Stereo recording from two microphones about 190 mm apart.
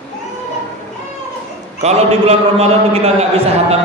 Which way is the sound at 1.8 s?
35° right (ahead or behind).